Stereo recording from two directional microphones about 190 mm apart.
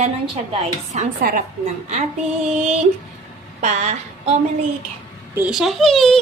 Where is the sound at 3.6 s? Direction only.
35° right (ahead or behind).